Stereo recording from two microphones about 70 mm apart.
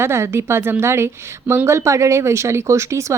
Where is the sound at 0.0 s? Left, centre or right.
Right.